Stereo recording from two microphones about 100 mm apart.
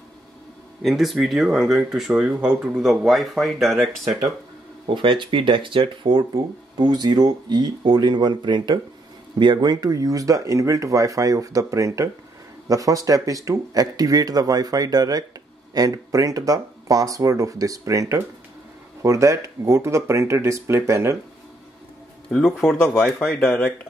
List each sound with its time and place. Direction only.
0.8 s speech: 5° right (ahead or behind)
2.2 s speech: 15° right (ahead or behind)
2.7 s speech: 5° right (ahead or behind)
4.8 s speech: 55° right (ahead or behind); by 21.2 s 30° right (ahead or behind)
22.3 s speech: 5° left (ahead or behind)